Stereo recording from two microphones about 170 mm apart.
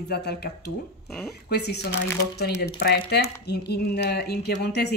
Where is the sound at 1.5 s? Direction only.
75° left (ahead or behind).